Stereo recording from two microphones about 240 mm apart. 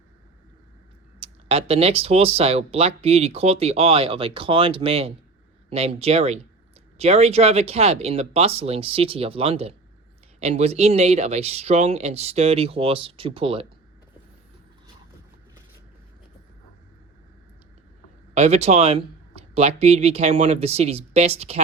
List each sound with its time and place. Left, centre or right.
1.2 s speech: right
18.3 s speech: right